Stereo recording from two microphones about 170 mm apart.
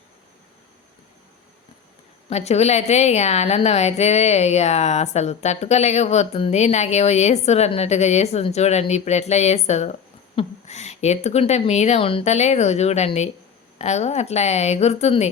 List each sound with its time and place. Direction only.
2.3 s a woman's voice: 40° left (ahead or behind)